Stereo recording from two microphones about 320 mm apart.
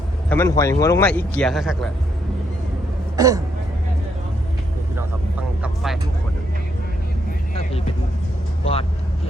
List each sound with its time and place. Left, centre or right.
0.3 s speech: centre
3.2 s throat clearing: centre
5.6 s speech: centre
8.6 s speech: centre